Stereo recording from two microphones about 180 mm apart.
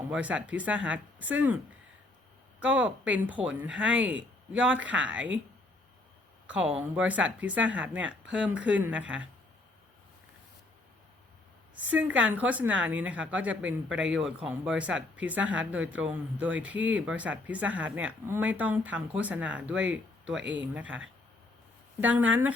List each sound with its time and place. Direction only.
0.1 s speech: 5° right (ahead or behind)
2.6 s speech: 10° right (ahead or behind)
6.5 s speech: 5° right (ahead or behind)
11.8 s speech: 10° right (ahead or behind)
20.3 s speech: 90° right
20.7 s speech: 5° right (ahead or behind)
22.0 s speech: 10° right (ahead or behind)